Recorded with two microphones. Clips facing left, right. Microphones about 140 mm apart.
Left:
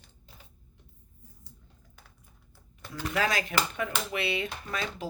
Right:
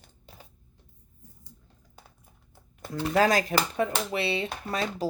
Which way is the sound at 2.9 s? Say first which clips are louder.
Right 6 dB; 40° right (ahead or behind).